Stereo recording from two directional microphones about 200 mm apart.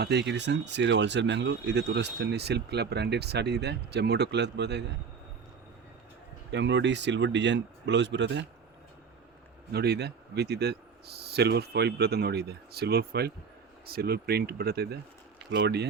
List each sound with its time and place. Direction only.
0.0 s speech: 60° right (ahead or behind)
6.5 s speech: 60° right (ahead or behind)
9.7 s speech: 55° right (ahead or behind)